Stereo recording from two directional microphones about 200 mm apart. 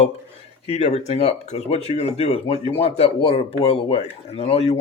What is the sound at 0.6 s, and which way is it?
Speech, 35° left (ahead or behind).